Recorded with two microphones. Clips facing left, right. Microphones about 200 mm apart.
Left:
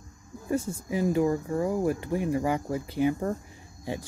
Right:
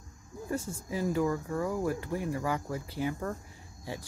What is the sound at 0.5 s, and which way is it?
Speech, 20° left (ahead or behind).